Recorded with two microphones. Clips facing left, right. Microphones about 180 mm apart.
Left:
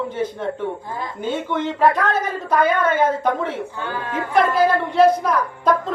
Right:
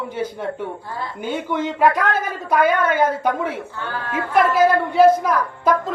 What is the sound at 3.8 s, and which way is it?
Speech, 15° left (ahead or behind).